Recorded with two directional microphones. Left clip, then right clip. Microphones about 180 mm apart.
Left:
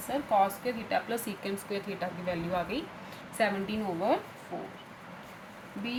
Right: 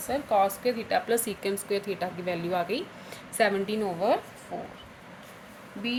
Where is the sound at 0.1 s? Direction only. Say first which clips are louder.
Right 2 dB; 55° right (ahead or behind).